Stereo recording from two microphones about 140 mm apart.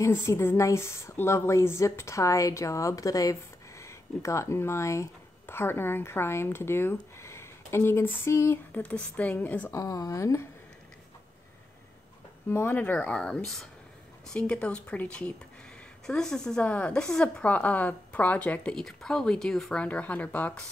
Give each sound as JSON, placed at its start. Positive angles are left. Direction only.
{"t": 0.0, "sound": "speech", "side_deg": 20}
{"t": 9.8, "sound": "speech", "side_deg": 25}
{"t": 12.4, "sound": "a woman's voice", "side_deg": 15}